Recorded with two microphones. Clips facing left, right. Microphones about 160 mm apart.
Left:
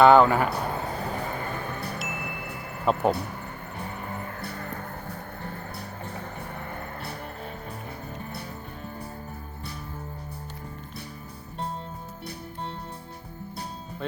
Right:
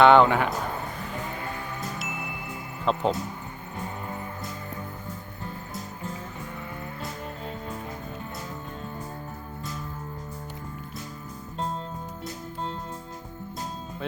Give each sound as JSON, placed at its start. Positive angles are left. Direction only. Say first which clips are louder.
{"t": 0.0, "sound": "speech", "louder": "even", "side_deg": 5}
{"t": 0.9, "sound": "a sound", "louder": "left 4 dB", "side_deg": 35}
{"t": 1.5, "sound": "wind chime", "louder": "left 2 dB", "side_deg": 55}
{"t": 2.9, "sound": "speech", "louder": "left 2 dB", "side_deg": 60}
{"t": 4.4, "sound": "music", "louder": "left 1 dB", "side_deg": 65}